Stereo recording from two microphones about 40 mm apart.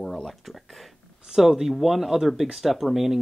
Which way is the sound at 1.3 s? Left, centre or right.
Centre.